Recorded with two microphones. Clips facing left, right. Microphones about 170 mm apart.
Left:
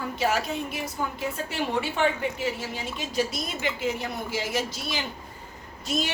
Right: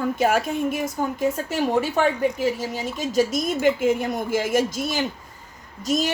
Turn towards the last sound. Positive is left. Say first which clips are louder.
# right 6 dB
turn(degrees=-40)  # may be behind; listen again after turning